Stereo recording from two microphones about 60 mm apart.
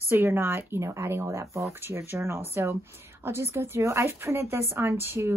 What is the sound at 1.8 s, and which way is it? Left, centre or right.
Speech, right.